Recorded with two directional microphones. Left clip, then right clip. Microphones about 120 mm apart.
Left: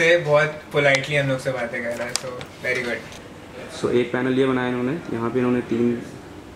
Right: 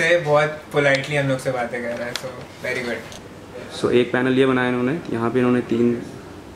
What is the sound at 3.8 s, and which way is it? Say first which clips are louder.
Speech: right 3 dB; 10° right (ahead or behind).